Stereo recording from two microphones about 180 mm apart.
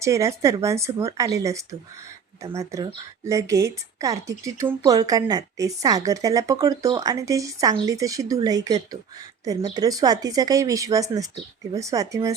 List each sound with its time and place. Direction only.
0.0 s a woman's voice: 15° right (ahead or behind)